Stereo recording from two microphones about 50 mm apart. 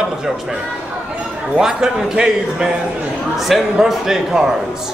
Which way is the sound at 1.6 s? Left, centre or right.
Centre.